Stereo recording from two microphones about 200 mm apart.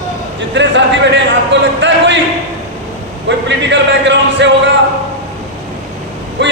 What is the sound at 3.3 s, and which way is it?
Speech, 65° right (ahead or behind).